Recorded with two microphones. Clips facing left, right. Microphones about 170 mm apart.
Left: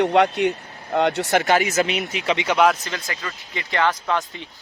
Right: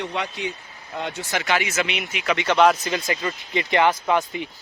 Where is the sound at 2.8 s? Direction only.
20° right (ahead or behind).